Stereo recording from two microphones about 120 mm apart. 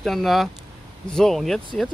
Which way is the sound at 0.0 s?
Centre (ahead or behind).